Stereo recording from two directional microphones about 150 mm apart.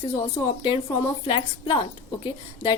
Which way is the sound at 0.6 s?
35° left (ahead or behind).